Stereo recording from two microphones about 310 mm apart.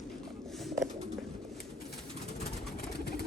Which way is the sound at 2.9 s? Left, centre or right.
Left.